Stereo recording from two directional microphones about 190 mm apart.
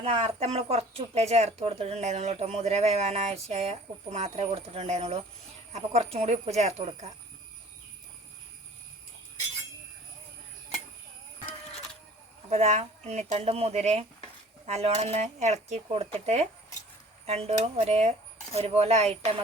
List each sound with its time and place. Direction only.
0.0 s speech: 35° right (ahead or behind)
12.5 s speech: 35° right (ahead or behind)